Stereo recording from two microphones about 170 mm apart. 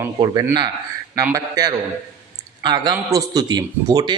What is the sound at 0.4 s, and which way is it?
Speech, 25° right (ahead or behind).